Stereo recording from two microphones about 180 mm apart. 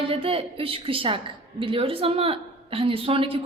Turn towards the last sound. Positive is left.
turn(degrees=-30)  # may be behind; listen again after turning